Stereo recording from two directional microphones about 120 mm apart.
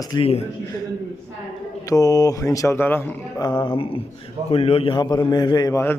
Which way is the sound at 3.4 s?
40° left (ahead or behind).